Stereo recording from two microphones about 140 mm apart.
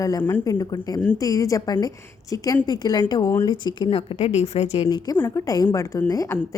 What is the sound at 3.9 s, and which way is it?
Speech, 45° left (ahead or behind).